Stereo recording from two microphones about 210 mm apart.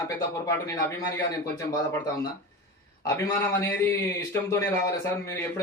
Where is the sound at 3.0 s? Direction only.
15° left (ahead or behind).